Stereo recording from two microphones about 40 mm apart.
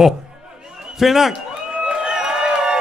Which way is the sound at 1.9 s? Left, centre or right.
Centre.